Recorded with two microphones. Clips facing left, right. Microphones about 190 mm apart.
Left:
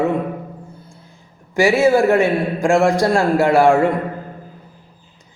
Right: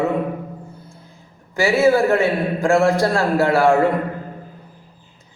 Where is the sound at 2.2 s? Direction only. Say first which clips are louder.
Left 2 dB; 15° left (ahead or behind).